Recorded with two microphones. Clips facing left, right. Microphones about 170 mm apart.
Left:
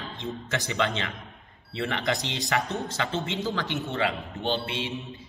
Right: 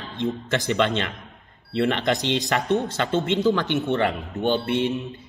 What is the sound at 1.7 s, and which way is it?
A man's voice, 65° right (ahead or behind).